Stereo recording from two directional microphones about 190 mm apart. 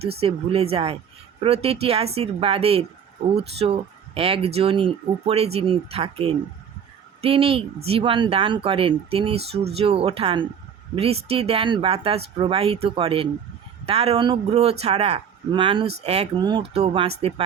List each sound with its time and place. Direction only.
0.2 s speech: 30° right (ahead or behind)